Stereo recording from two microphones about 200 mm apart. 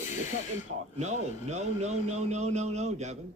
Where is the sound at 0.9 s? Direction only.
35° right (ahead or behind).